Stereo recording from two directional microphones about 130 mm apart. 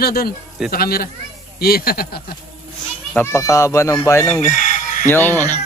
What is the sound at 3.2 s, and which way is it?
A man's voice, 20° left (ahead or behind).